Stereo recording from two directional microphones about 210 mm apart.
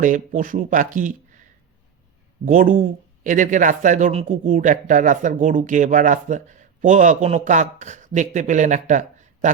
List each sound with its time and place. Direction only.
0.0 s speech: 40° right (ahead or behind)